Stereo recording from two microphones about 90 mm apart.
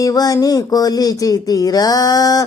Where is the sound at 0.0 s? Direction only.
45° left (ahead or behind).